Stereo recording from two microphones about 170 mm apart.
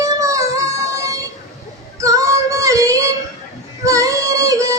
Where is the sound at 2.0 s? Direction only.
20° right (ahead or behind).